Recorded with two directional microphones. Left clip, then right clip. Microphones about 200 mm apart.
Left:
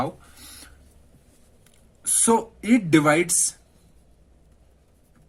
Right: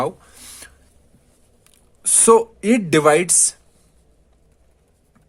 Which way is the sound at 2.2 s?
60° right (ahead or behind).